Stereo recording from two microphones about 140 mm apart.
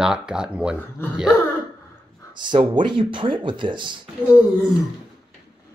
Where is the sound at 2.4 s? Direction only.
35° right (ahead or behind).